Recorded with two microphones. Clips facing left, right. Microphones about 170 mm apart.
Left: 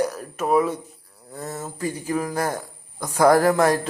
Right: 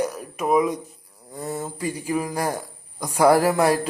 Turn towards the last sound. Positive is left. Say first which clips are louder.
# left 1 dB
turn(degrees=-10)  # may be behind; listen again after turning